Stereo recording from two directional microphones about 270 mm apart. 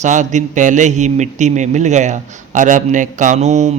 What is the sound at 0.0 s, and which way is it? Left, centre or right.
Speech, right.